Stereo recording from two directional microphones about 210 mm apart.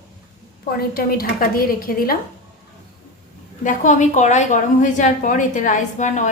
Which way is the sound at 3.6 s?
35° left (ahead or behind).